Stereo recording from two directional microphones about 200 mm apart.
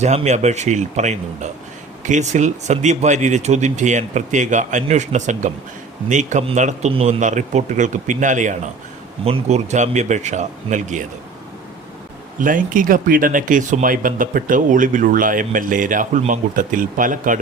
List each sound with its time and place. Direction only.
0.0 s speech: 35° right (ahead or behind)
12.4 s speech: 40° right (ahead or behind)